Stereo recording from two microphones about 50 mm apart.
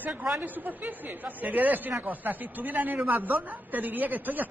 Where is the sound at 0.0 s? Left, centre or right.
Right.